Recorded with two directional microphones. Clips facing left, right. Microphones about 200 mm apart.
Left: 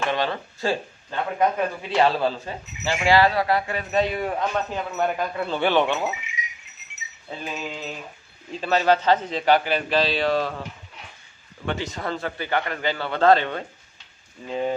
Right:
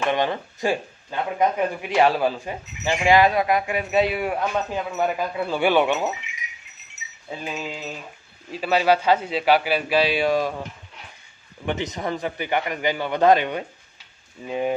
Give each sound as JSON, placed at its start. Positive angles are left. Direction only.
{"t": 0.1, "sound": "speech", "side_deg": -15}
{"t": 7.3, "sound": "speech", "side_deg": -10}
{"t": 11.6, "sound": "speech", "side_deg": -20}